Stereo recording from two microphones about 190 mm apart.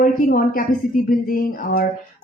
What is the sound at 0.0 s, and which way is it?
Speech, 50° left (ahead or behind).